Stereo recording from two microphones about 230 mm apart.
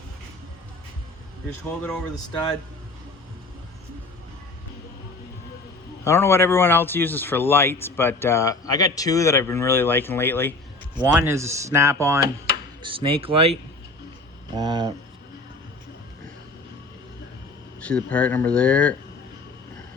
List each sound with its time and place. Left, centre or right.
2.1 s speech: centre
6.1 s speech: centre
11.0 s speech: centre
17.8 s speech: centre